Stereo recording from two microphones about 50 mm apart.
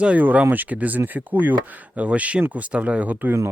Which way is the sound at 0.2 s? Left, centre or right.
Right.